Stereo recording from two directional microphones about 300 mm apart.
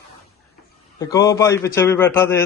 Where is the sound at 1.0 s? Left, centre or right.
Centre.